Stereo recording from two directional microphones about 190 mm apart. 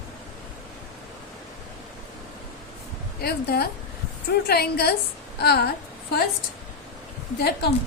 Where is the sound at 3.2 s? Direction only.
55° left (ahead or behind).